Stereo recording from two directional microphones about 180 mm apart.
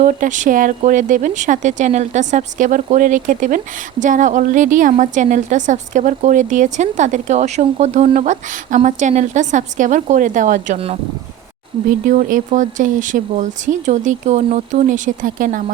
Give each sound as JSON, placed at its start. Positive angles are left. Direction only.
{"t": 0.0, "sound": "a woman's voice", "side_deg": -45}